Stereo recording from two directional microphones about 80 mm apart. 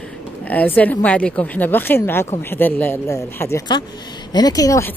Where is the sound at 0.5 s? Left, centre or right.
Left.